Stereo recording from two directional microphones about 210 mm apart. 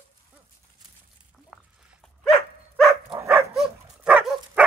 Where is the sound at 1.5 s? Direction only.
Centre (ahead or behind).